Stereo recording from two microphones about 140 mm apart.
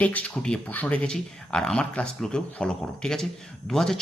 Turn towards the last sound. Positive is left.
turn(degrees=5)  # may be behind; listen again after turning